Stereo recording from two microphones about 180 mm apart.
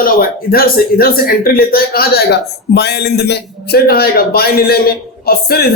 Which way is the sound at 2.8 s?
65° left (ahead or behind).